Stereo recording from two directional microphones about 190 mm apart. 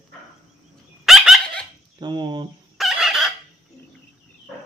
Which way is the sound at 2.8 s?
Centre (ahead or behind).